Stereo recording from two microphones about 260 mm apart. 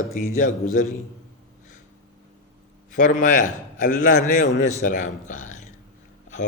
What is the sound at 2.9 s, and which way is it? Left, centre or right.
A man's voice, left.